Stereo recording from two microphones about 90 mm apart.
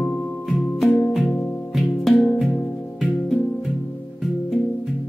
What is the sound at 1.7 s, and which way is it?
Music, centre (ahead or behind).